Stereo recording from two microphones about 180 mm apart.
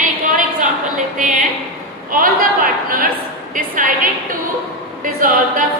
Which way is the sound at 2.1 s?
50° right (ahead or behind).